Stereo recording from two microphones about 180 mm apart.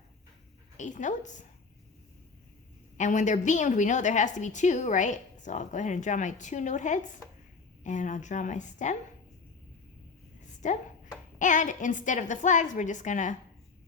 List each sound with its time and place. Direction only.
0.8 s a woman's voice: 45° left (ahead or behind)
3.0 s a woman's voice: 40° left (ahead or behind)
10.6 s a woman's voice: 45° left (ahead or behind)